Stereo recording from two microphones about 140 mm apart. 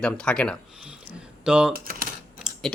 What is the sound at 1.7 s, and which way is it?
Speech, 90° right.